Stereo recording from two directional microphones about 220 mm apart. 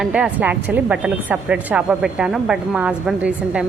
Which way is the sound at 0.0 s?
5° right (ahead or behind).